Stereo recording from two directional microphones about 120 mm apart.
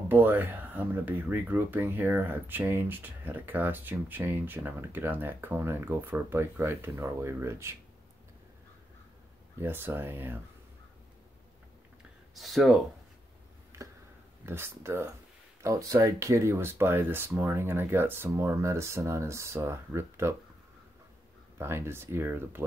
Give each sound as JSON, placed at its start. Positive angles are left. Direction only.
{"t": 0.1, "sound": "speech", "side_deg": -15}
{"t": 9.6, "sound": "speech", "side_deg": -15}
{"t": 12.4, "sound": "speech", "side_deg": 0}
{"t": 14.4, "sound": "speech", "side_deg": -20}
{"t": 21.5, "sound": "speech", "side_deg": -20}